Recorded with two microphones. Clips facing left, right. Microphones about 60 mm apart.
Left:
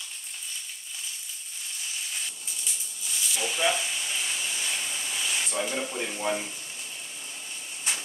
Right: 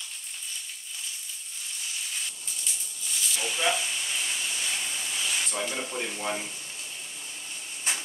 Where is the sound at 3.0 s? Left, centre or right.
Centre.